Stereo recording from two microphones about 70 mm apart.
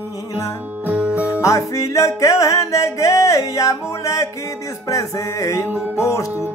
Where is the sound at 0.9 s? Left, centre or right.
Centre.